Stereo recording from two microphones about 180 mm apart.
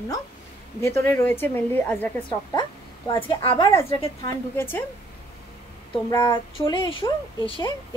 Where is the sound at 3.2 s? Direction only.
25° left (ahead or behind).